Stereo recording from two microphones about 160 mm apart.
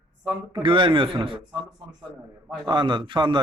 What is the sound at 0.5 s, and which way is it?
Speech, 30° right (ahead or behind).